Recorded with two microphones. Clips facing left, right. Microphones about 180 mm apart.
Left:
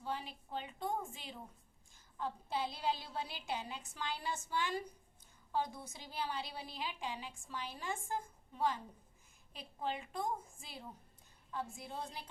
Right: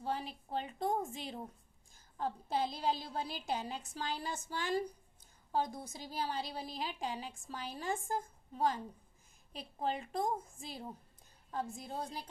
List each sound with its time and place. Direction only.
0.0 s a woman's voice: 40° right (ahead or behind)